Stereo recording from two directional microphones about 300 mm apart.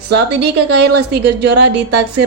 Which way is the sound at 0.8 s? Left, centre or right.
Right.